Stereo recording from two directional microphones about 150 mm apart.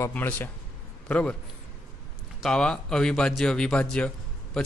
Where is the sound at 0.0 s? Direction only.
10° left (ahead or behind).